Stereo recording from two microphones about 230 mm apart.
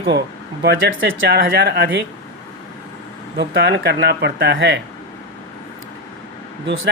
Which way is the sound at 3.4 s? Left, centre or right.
Right.